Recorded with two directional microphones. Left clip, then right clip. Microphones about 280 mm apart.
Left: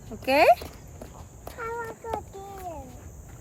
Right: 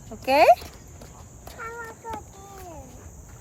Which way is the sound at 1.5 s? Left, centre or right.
Centre.